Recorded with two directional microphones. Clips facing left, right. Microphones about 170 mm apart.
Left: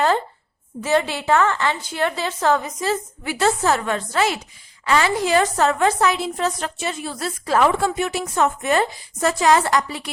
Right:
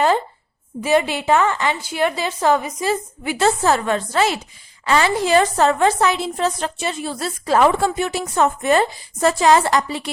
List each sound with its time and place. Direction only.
0.8 s a woman's voice: 15° right (ahead or behind)
3.3 s a woman's voice: 30° right (ahead or behind)